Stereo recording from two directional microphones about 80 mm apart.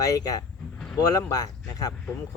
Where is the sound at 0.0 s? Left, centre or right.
Left.